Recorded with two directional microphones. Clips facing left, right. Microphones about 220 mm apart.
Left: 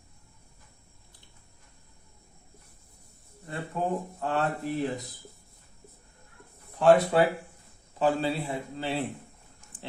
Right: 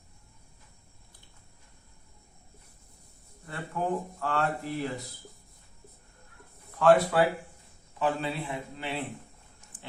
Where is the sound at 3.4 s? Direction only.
25° left (ahead or behind).